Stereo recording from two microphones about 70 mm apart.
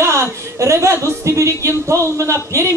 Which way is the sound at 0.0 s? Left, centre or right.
Right.